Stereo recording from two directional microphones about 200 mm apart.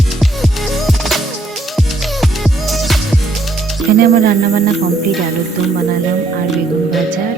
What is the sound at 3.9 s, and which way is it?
Music, 50° right (ahead or behind).